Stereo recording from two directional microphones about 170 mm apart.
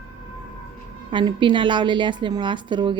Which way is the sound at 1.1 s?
30° right (ahead or behind).